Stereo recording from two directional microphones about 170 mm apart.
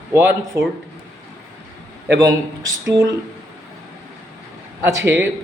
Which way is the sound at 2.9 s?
20° right (ahead or behind).